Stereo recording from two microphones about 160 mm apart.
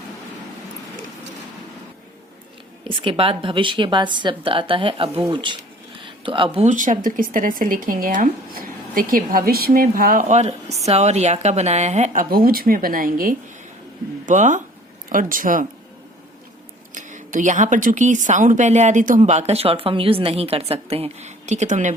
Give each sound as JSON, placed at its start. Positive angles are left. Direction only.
{"t": 2.8, "sound": "a woman's voice", "side_deg": -35}
{"t": 6.0, "sound": "a sound", "side_deg": -30}
{"t": 6.7, "sound": "speech", "side_deg": -50}
{"t": 14.3, "sound": "speech", "side_deg": -50}
{"t": 16.9, "sound": "speech", "side_deg": -50}